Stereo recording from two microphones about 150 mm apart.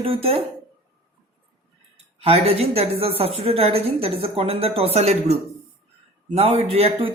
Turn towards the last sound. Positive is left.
turn(degrees=-40)  # may be behind; listen again after turning